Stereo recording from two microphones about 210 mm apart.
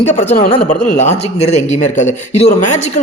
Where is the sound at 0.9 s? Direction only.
35° left (ahead or behind).